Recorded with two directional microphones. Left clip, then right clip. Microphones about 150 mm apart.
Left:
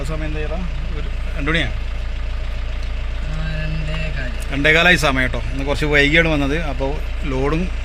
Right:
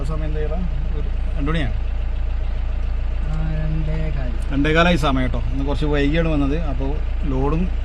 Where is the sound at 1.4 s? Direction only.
25° right (ahead or behind).